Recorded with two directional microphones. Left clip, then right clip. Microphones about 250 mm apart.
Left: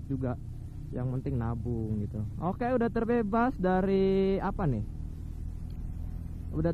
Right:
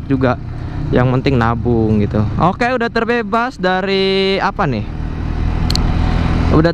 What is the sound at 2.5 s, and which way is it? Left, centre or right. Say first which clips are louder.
Speech: right 14 dB; centre.